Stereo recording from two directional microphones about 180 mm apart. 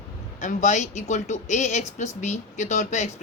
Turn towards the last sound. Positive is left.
turn(degrees=40)  # may be behind; listen again after turning